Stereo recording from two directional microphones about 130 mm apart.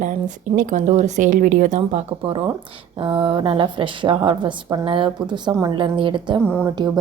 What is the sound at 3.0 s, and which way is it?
A woman's voice, 40° right (ahead or behind).